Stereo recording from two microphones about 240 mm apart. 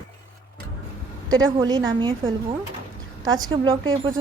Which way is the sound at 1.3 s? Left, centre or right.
Centre.